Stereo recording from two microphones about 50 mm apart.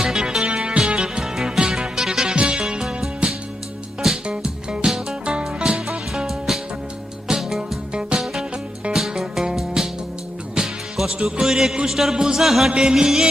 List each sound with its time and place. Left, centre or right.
0.0 s music: centre
0.4 s music: right
4.3 s music: centre